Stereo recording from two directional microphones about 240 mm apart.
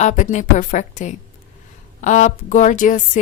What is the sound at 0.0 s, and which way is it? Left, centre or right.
Speech, left.